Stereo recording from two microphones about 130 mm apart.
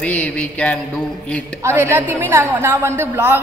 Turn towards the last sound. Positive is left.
turn(degrees=-20)  # may be behind; listen again after turning